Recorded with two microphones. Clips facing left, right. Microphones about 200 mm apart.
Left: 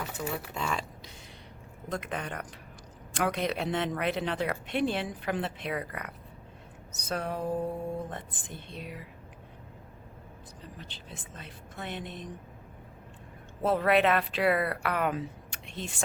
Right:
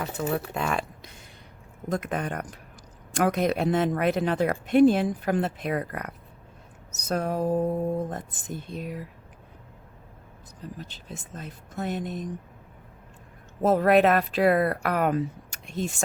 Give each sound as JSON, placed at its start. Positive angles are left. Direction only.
{"t": 0.0, "sound": "speech", "side_deg": -55}
{"t": 1.9, "sound": "speech", "side_deg": -50}
{"t": 6.9, "sound": "a sound", "side_deg": -45}
{"t": 8.1, "sound": "speech", "side_deg": -40}
{"t": 10.8, "sound": "speech", "side_deg": -45}
{"t": 13.6, "sound": "speech", "side_deg": -45}